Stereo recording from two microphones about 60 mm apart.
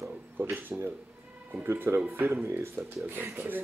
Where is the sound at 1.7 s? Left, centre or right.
Right.